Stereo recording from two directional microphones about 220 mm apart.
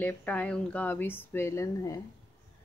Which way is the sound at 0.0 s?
5° left (ahead or behind).